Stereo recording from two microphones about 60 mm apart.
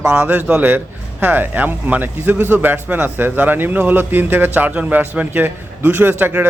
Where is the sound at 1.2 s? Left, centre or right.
Right.